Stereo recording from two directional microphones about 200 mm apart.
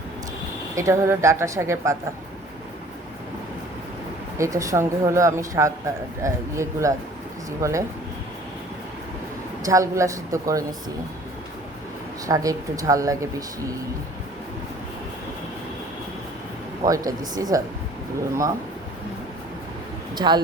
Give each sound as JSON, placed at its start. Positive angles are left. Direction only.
{"t": 0.8, "sound": "speech", "side_deg": -15}
{"t": 4.4, "sound": "speech", "side_deg": -15}
{"t": 9.6, "sound": "speech", "side_deg": -15}
{"t": 12.2, "sound": "speech", "side_deg": -15}
{"t": 16.8, "sound": "speech", "side_deg": -20}
{"t": 20.1, "sound": "speech", "side_deg": -20}